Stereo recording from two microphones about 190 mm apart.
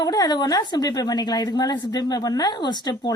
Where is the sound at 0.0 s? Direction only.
20° left (ahead or behind).